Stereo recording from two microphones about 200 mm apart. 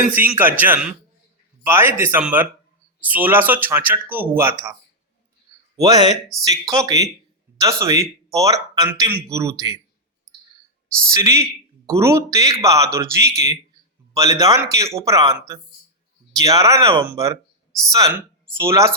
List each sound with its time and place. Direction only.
0.1 s speech: 10° right (ahead or behind)
5.7 s speech: 15° right (ahead or behind)
11.1 s speech: 15° right (ahead or behind)
17.1 s a sound: 15° right (ahead or behind)
18.5 s speech: 15° right (ahead or behind)